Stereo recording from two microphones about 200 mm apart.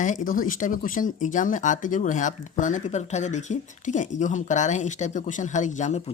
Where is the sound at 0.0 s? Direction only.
40° left (ahead or behind).